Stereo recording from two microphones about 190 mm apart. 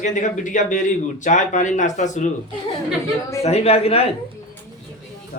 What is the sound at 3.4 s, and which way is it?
Speech, 35° left (ahead or behind).